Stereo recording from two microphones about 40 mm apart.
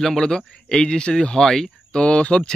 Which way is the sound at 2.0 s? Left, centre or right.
Left.